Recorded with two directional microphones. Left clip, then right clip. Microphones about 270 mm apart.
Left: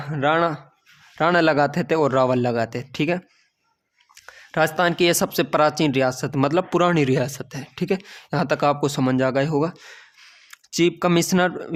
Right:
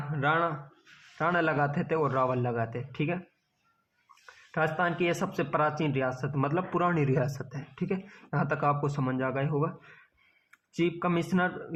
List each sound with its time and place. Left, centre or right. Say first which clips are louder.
0.0 s speech: left 8 dB; left
4.3 s speech: left 9 dB; left